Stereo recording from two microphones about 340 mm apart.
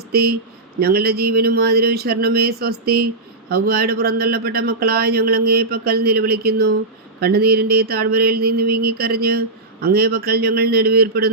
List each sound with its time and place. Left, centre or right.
0.1 s speech: right